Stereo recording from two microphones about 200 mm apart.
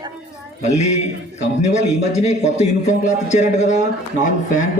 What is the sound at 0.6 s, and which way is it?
A man's voice, 35° left (ahead or behind).